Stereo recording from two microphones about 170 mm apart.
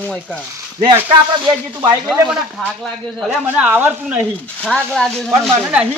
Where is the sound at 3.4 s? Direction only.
10° right (ahead or behind).